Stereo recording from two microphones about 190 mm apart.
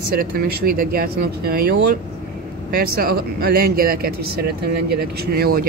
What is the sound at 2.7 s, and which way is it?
Speech, 50° right (ahead or behind).